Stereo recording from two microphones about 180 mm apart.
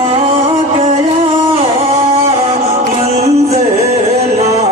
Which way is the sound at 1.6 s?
35° right (ahead or behind).